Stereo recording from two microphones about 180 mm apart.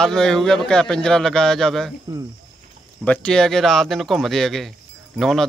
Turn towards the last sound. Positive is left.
turn(degrees=0)  # may be behind; listen again after turning